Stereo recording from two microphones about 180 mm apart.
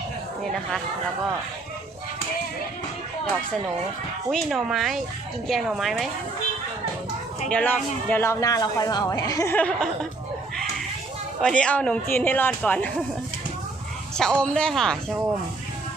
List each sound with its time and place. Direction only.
4.3 s speech: centre (ahead or behind)
7.5 s a man's voice: 10° left (ahead or behind)
11.4 s a man's voice: 5° left (ahead or behind)
14.2 s speech: 5° left (ahead or behind)